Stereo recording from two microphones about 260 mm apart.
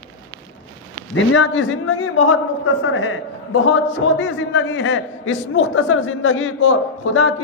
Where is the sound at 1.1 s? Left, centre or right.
Left.